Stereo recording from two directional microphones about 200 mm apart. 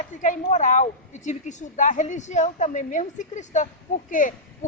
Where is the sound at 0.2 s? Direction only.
40° left (ahead or behind).